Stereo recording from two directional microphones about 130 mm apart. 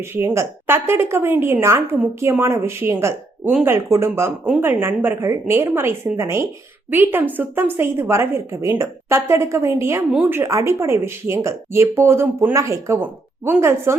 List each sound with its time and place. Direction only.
0.0 s speech: 20° right (ahead or behind)